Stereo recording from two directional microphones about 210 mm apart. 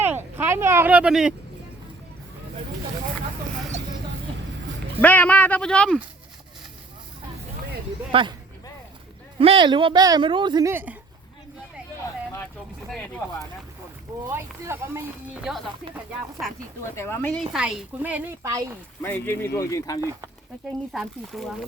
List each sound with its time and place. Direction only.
0.0 s a sound: 10° right (ahead or behind)
4.9 s speech: 5° left (ahead or behind)
8.1 s speech: 25° right (ahead or behind)
9.4 s a woman's voice: 25° right (ahead or behind)
14.3 s speech: 10° right (ahead or behind)
16.8 s speech: 15° left (ahead or behind); by 18.8 s 15° right (ahead or behind)
19.0 s speech: 10° left (ahead or behind)
20.0 s speech: 15° right (ahead or behind)
20.9 s speech: centre (ahead or behind)